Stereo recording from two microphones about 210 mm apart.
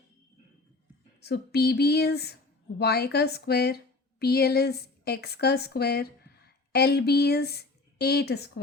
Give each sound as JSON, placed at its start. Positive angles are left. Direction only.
{"t": 1.2, "sound": "speech", "side_deg": 50}